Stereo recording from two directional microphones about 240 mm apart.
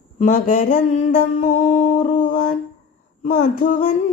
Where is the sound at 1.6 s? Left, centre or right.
Left.